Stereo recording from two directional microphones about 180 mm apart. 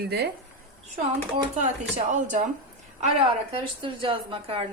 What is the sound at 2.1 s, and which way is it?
Speech, 45° right (ahead or behind).